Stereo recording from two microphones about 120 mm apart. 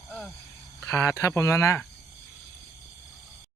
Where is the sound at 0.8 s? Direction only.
20° left (ahead or behind).